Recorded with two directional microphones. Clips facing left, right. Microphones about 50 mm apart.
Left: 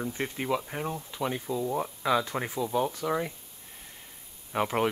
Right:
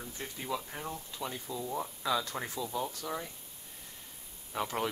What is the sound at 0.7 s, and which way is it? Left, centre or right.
Speech, left.